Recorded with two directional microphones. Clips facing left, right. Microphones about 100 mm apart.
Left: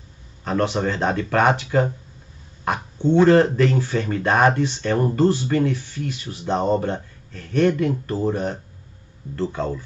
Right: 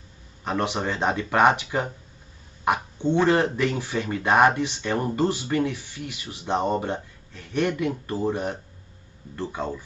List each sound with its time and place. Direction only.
0.4 s speech: 15° right (ahead or behind)
2.6 s a sound: 15° right (ahead or behind)
3.3 s speech: 15° right (ahead or behind)